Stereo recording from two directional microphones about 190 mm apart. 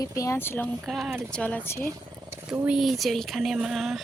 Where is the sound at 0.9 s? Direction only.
Centre (ahead or behind).